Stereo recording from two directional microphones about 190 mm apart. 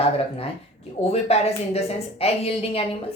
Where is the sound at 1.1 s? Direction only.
35° left (ahead or behind).